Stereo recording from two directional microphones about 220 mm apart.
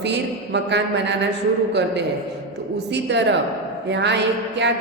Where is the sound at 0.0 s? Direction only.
50° right (ahead or behind).